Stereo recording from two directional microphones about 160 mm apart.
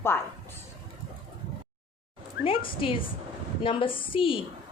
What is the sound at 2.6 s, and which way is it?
A woman's voice, 35° left (ahead or behind).